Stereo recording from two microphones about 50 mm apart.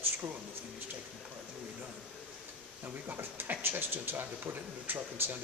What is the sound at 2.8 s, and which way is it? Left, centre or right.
Speech, right.